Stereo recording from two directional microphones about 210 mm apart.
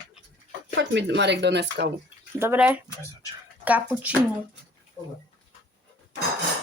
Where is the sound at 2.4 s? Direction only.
10° right (ahead or behind).